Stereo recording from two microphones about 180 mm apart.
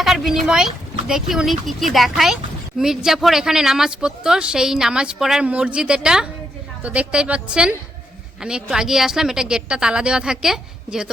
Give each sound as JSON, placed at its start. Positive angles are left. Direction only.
{"t": 0.0, "sound": "a woman's voice", "side_deg": 0}